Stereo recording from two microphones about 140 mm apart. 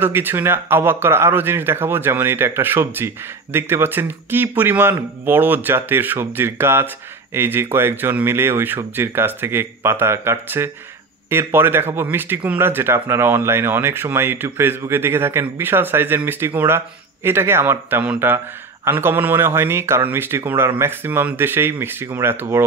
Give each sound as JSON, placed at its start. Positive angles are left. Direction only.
{"t": 0.0, "sound": "a man's voice", "side_deg": -15}